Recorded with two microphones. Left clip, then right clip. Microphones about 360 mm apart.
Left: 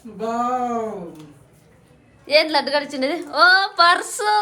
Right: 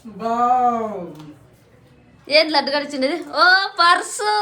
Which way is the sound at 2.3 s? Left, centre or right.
Centre.